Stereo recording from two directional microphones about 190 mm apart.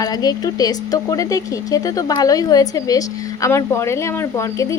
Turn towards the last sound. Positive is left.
turn(degrees=15)  # may be behind; listen again after turning